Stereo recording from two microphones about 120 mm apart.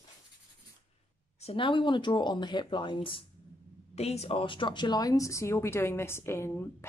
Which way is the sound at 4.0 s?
60° left (ahead or behind).